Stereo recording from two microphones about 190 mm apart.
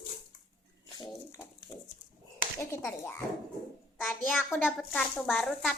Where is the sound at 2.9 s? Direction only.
10° left (ahead or behind).